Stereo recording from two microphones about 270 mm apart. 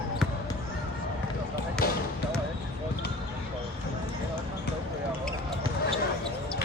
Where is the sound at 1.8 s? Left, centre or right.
Left.